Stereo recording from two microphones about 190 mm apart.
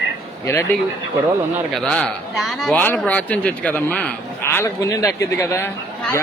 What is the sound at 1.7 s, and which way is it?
Speech, 5° left (ahead or behind).